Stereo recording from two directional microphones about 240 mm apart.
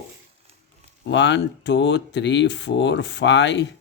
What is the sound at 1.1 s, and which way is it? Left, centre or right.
Speech, left.